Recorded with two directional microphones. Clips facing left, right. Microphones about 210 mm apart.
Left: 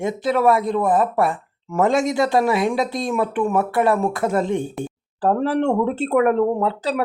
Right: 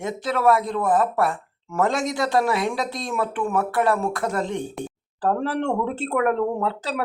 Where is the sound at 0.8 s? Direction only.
20° left (ahead or behind).